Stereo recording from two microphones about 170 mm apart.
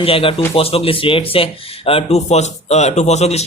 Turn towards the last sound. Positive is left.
turn(degrees=40)  # may be behind; listen again after turning